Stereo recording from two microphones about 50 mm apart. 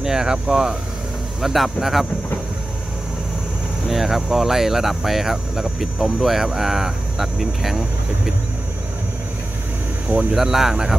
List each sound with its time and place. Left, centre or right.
0.0 s speech: centre
3.8 s speech: centre
10.3 s speech: centre